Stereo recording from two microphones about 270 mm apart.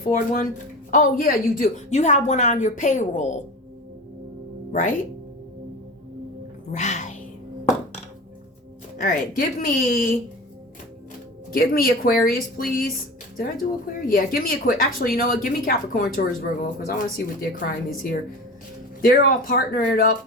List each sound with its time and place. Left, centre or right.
0.1 s a woman's voice: left
4.7 s speech: left
6.7 s music: left
9.0 s a woman's voice: left
11.5 s a woman's voice: left